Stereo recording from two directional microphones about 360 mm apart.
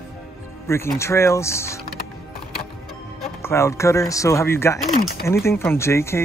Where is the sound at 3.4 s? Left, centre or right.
Centre.